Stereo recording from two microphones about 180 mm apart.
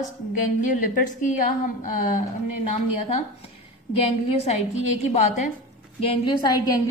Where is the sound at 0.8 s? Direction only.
50° left (ahead or behind).